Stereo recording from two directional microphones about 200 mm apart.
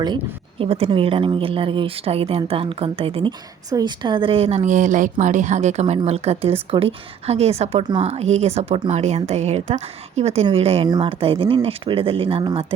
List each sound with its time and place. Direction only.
0.6 s a woman's voice: 30° right (ahead or behind)